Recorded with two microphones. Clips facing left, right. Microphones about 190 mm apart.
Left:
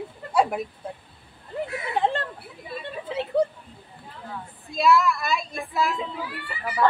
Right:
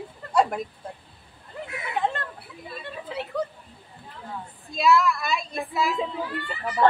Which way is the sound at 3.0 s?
25° left (ahead or behind).